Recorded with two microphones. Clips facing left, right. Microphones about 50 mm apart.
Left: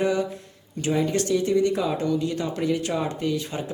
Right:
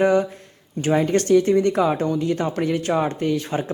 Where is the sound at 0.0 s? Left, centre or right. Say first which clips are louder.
Right 6 dB; right.